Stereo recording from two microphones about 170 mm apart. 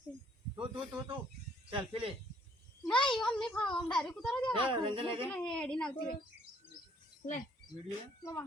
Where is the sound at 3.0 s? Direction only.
5° left (ahead or behind).